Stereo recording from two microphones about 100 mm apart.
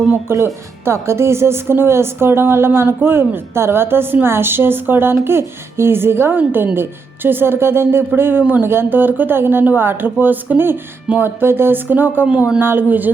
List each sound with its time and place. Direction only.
0.3 s speech: 25° right (ahead or behind)